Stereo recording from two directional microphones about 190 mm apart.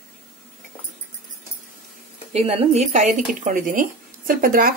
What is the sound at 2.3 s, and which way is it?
Speech, 35° right (ahead or behind).